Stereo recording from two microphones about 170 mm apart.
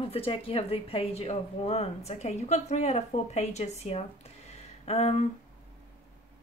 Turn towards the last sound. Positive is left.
turn(degrees=40)  # may be behind; listen again after turning